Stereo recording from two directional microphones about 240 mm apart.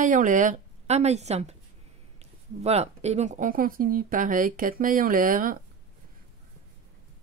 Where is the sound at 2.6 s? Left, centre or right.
Right.